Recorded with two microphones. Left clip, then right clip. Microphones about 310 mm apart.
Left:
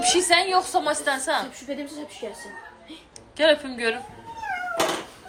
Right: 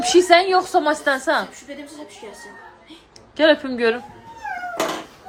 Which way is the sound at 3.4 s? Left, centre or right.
Right.